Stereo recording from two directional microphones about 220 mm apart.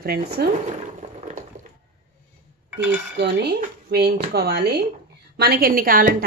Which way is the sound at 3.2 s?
50° right (ahead or behind).